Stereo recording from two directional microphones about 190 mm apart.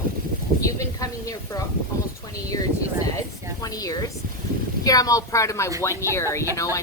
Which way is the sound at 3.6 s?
20° left (ahead or behind).